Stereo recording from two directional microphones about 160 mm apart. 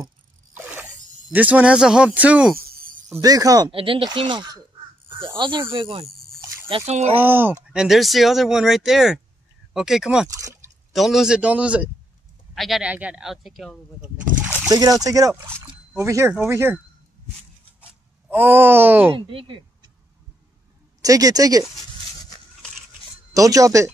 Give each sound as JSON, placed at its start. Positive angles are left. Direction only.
{"t": 0.6, "sound": "speech", "side_deg": -10}
{"t": 3.2, "sound": "speech", "side_deg": -20}
{"t": 3.7, "sound": "speech", "side_deg": -35}
{"t": 7.2, "sound": "speech", "side_deg": -10}
{"t": 10.3, "sound": "a sound", "side_deg": -20}
{"t": 10.9, "sound": "speech", "side_deg": 0}
{"t": 14.7, "sound": "speech", "side_deg": -25}
{"t": 18.3, "sound": "speech", "side_deg": -10}
{"t": 19.1, "sound": "a woman's voice", "side_deg": -35}
{"t": 21.0, "sound": "speech", "side_deg": -20}
{"t": 23.3, "sound": "speech", "side_deg": -20}